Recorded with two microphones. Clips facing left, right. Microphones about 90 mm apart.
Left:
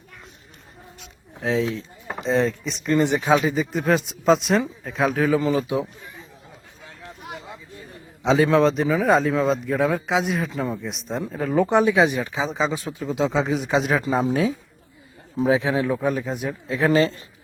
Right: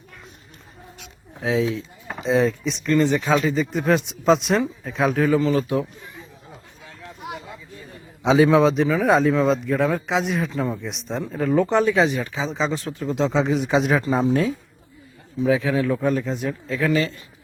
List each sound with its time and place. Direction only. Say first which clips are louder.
1.4 s a man's voice: right 1 dB; centre (ahead or behind)
2.8 s speech: right 1 dB; 20° left (ahead or behind)
3.5 s a man's voice: right 1 dB; centre (ahead or behind)
5.5 s speech: right 1 dB; 15° left (ahead or behind)
7.2 s a sound: right 4 dB; 5° right (ahead or behind)
8.2 s a man's voice: right 2 dB; 5° right (ahead or behind); by 12.5 s 15° left (ahead or behind)
12.5 s a man's voice: even; 5° left (ahead or behind)
15.4 s a man's voice: even; 25° left (ahead or behind)
16.0 s speech: right 2 dB; 10° left (ahead or behind)
16.8 s a man's voice: left 3 dB; 35° left (ahead or behind)